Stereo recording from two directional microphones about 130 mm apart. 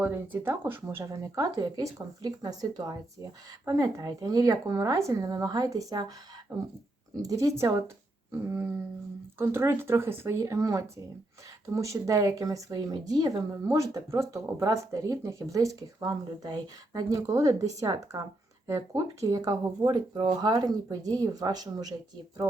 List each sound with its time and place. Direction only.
0.0 s speech: 15° right (ahead or behind)